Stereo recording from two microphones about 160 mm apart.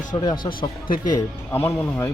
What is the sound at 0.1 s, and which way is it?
Speech, 30° left (ahead or behind).